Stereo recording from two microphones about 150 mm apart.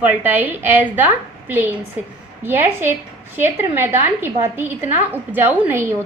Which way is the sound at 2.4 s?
15° right (ahead or behind).